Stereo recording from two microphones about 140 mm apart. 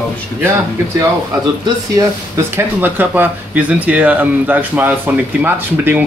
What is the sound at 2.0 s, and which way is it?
Speech, 20° right (ahead or behind).